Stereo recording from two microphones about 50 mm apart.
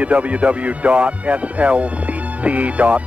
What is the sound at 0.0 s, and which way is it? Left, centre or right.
Speech, right.